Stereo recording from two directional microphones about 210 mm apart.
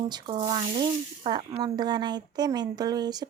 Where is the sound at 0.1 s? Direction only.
20° right (ahead or behind).